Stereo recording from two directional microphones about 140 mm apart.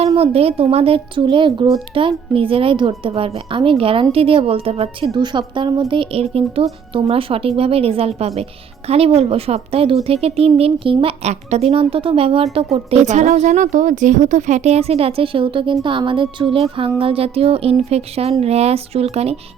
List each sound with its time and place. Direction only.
0.2 s a woman's voice: 45° right (ahead or behind)
5.1 s a woman's voice: 30° right (ahead or behind); by 19.4 s 50° right (ahead or behind)